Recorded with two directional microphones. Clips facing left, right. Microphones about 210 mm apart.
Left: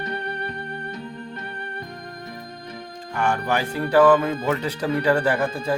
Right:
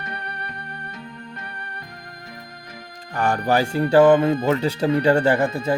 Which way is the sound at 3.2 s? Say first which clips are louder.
Right 3 dB; 35° right (ahead or behind).